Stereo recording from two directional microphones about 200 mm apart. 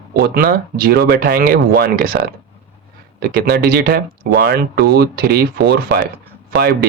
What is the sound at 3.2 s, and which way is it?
Speech, 50° right (ahead or behind).